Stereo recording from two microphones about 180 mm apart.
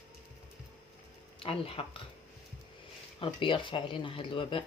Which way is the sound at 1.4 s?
30° left (ahead or behind).